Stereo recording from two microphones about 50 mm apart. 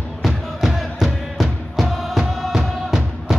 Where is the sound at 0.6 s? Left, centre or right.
Centre.